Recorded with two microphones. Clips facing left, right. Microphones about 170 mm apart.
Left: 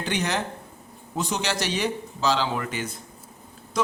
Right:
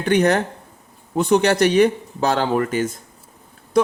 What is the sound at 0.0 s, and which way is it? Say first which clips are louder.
A man's voice: right 10 dB; 55° right (ahead or behind).